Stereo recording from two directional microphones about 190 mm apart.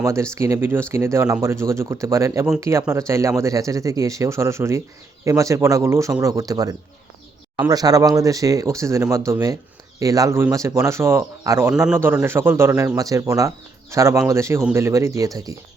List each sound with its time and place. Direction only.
0.0 s speech: 15° right (ahead or behind)